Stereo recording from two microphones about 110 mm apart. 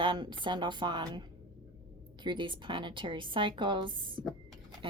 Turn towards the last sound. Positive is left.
turn(degrees=-50)  # may be behind; listen again after turning